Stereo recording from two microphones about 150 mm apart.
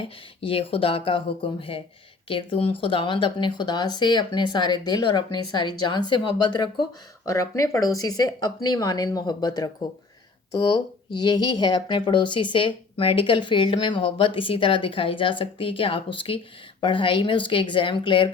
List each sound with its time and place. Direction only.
0.4 s speech: 35° left (ahead or behind)
11.2 s speech: 30° left (ahead or behind)